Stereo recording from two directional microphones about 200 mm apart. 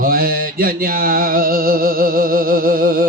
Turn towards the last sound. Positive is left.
turn(degrees=-45)  # may be behind; listen again after turning